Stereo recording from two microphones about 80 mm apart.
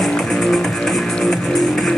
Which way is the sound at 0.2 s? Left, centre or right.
Centre.